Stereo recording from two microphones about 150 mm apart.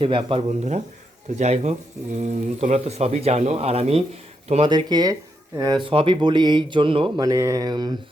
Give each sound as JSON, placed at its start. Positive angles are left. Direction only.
{"t": 0.0, "sound": "speech", "side_deg": -35}
{"t": 4.7, "sound": "speech", "side_deg": -30}
{"t": 7.2, "sound": "speech", "side_deg": -25}